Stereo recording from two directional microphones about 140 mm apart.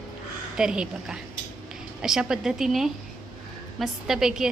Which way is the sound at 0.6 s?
5° right (ahead or behind).